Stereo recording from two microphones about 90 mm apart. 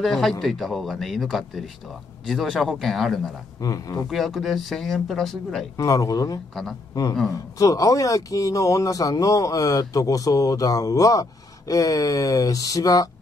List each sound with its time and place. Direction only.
0.0 s speech: centre (ahead or behind)
3.6 s speech: 40° left (ahead or behind)
4.1 s speech: centre (ahead or behind)
5.8 s speech: 40° left (ahead or behind)
7.5 s speech: 40° left (ahead or behind)